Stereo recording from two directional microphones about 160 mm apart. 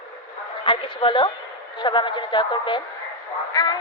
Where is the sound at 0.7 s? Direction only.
30° left (ahead or behind).